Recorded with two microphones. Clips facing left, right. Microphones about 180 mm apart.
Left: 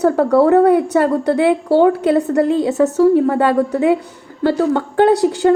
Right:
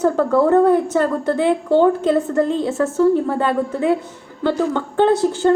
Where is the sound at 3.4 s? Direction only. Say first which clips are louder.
Left 4 dB; 15° left (ahead or behind).